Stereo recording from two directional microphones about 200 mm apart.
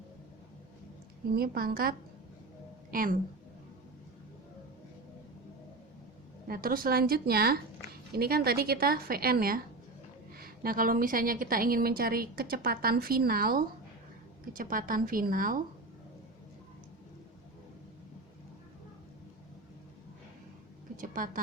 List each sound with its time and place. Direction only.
1.4 s a woman's voice: 50° right (ahead or behind)
6.5 s a woman's voice: 45° right (ahead or behind)
20.9 s a sound: 40° right (ahead or behind)